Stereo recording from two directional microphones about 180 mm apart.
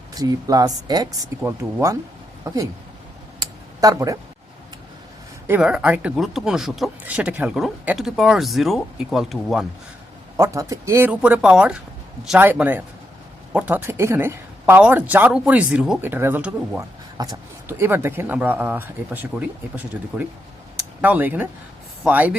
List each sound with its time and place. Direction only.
0.1 s speech: 20° right (ahead or behind)
3.4 s a sound: 20° right (ahead or behind)
5.5 s speech: 5° right (ahead or behind)
10.3 s speech: 15° right (ahead or behind)